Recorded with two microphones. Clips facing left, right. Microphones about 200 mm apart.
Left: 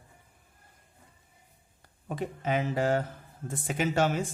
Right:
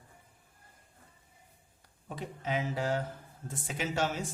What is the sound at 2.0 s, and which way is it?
A man's voice, 55° left (ahead or behind).